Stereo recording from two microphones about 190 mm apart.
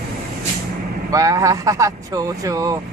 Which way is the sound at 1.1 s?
15° right (ahead or behind).